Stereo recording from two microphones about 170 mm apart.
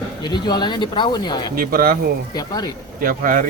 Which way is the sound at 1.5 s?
55° right (ahead or behind).